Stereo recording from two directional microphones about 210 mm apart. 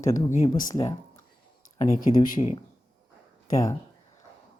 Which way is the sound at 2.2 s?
40° left (ahead or behind).